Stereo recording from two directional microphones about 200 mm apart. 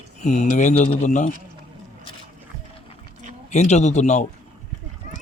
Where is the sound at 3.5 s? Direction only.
35° left (ahead or behind).